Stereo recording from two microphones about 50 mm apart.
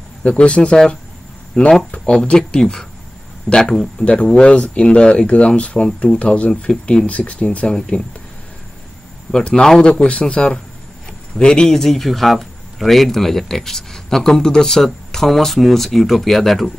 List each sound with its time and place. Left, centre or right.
0.2 s speech: left
4.0 s speech: left
7.1 s speech: left
9.3 s speech: centre
11.7 s speech: centre